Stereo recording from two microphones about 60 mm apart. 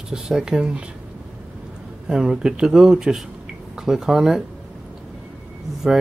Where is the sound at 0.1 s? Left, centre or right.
Centre.